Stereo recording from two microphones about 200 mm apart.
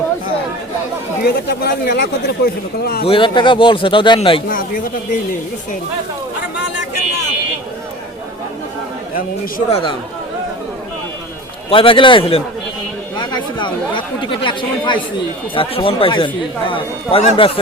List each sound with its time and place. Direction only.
1.2 s speech: 55° left (ahead or behind)
3.1 s speech: 25° left (ahead or behind)
4.4 s speech: 45° left (ahead or behind)
9.6 s speech: 30° left (ahead or behind)
11.7 s speech: 25° left (ahead or behind)